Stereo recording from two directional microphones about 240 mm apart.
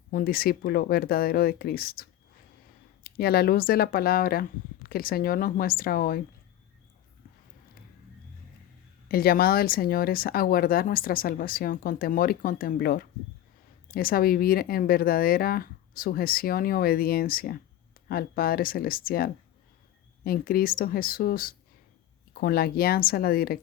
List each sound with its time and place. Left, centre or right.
0.1 s speech: left
9.0 s speech: left